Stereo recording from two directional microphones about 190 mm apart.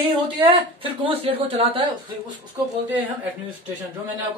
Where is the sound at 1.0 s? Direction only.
30° right (ahead or behind).